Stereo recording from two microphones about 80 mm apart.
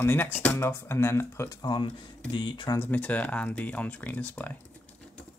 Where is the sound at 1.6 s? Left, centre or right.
Left.